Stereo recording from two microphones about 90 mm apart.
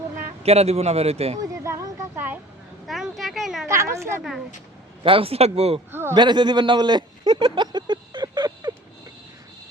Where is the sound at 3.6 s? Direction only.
30° right (ahead or behind).